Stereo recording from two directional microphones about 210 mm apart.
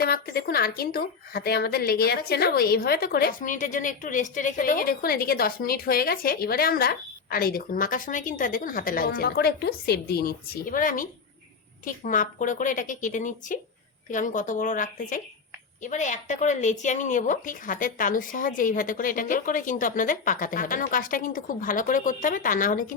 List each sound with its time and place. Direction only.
0.0 s speech: 45° left (ahead or behind)